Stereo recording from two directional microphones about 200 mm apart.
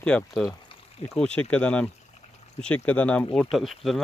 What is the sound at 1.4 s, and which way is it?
Speech, 5° left (ahead or behind).